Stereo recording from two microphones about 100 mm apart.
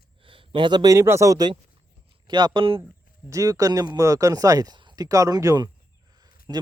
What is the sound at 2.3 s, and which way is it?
Speech, 50° right (ahead or behind).